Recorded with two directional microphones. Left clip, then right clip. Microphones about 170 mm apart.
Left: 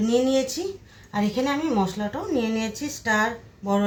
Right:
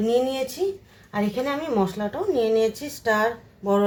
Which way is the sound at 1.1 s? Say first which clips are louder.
Left 1 dB; 20° right (ahead or behind).